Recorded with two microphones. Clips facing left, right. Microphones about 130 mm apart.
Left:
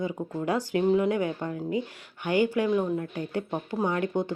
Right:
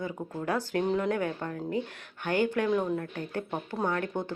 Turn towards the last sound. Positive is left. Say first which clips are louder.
# left 4 dB
turn(degrees=15)  # may be behind; listen again after turning